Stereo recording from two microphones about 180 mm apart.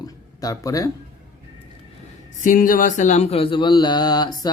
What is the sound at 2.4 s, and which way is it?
Speech, 50° left (ahead or behind).